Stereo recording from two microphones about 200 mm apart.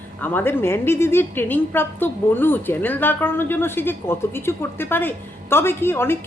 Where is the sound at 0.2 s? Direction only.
10° left (ahead or behind).